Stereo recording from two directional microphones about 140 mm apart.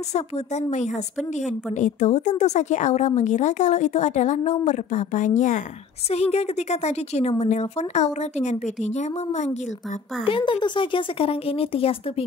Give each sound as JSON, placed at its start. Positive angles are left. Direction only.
{"t": 0.1, "sound": "speech", "side_deg": 55}
{"t": 6.0, "sound": "speech", "side_deg": 45}
{"t": 10.2, "sound": "speech", "side_deg": 40}